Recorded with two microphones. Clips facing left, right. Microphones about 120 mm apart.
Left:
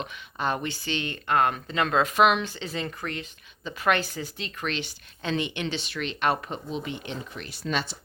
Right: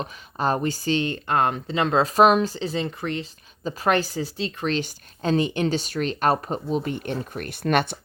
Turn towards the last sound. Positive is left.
turn(degrees=-60)  # may be behind; listen again after turning